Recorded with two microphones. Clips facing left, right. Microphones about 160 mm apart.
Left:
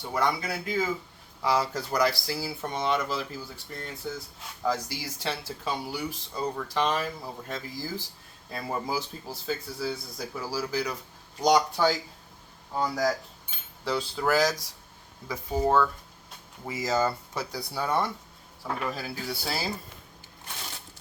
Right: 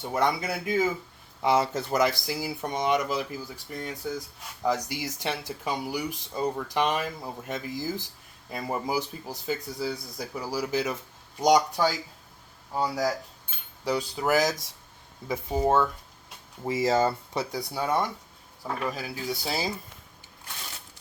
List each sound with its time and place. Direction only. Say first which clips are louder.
0.1 s speech: right 2 dB; 20° right (ahead or behind)
16.6 s speech: right 3 dB; 30° right (ahead or behind)